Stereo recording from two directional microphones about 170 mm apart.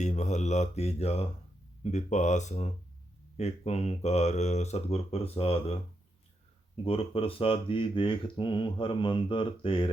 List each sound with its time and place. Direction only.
0.0 s speech: 45° left (ahead or behind)
6.8 s speech: 35° left (ahead or behind)